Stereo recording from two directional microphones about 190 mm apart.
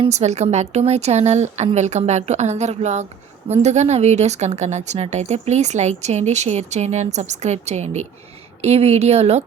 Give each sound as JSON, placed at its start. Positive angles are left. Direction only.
{"t": 0.0, "sound": "a woman's voice", "side_deg": -35}